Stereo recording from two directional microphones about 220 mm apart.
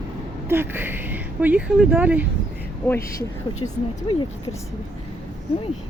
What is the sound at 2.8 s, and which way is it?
Speech, 15° left (ahead or behind).